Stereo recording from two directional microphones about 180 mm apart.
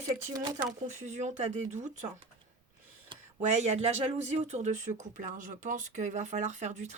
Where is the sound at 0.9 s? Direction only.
40° right (ahead or behind).